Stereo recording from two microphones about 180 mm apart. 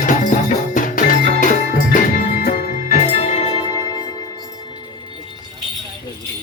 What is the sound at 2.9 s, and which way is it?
Music, 35° left (ahead or behind).